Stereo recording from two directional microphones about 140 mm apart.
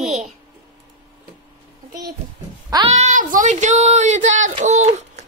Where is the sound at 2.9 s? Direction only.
60° right (ahead or behind).